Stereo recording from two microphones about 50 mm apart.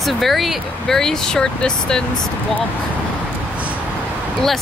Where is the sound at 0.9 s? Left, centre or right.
Centre.